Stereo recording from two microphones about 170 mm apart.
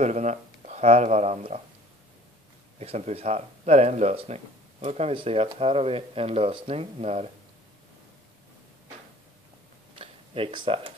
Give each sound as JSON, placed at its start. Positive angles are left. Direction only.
{"t": 0.0, "sound": "speech", "side_deg": -45}
{"t": 2.8, "sound": "speech", "side_deg": -35}
{"t": 9.9, "sound": "a sound", "side_deg": -35}